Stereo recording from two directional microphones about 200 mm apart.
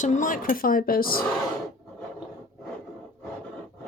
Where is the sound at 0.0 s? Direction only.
40° left (ahead or behind).